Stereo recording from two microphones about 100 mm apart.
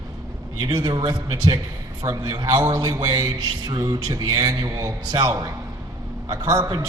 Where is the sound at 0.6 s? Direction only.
45° right (ahead or behind).